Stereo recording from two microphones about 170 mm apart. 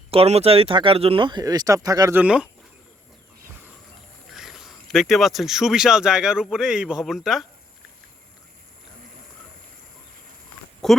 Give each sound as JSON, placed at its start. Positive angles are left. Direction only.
{"t": 0.1, "sound": "speech", "side_deg": -35}
{"t": 4.4, "sound": "speech", "side_deg": 0}
{"t": 10.8, "sound": "speech", "side_deg": 0}